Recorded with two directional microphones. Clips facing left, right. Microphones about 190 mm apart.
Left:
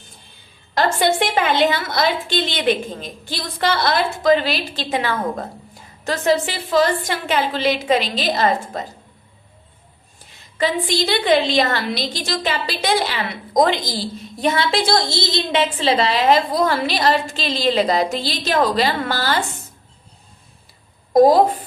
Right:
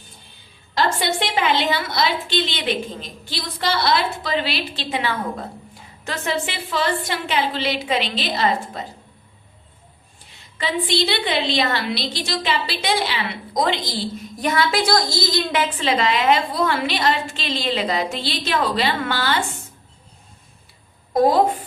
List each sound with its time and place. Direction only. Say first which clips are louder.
0.7 s a woman's voice: left 4 dB; 50° left (ahead or behind)
10.6 s a woman's voice: left 2 dB; 45° left (ahead or behind)
14.4 s a woman's voice: left 1 dB; 25° left (ahead or behind)
21.1 s a woman's voice: left 4 dB; 40° left (ahead or behind)